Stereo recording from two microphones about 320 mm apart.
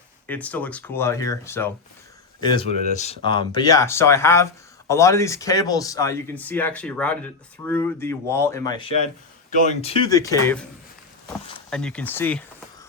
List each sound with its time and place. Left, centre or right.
0.3 s speech: centre
11.7 s speech: centre